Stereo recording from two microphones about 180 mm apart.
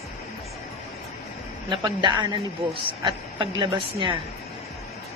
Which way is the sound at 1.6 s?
25° right (ahead or behind).